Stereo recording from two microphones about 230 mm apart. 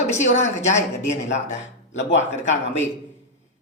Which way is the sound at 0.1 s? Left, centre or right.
Left.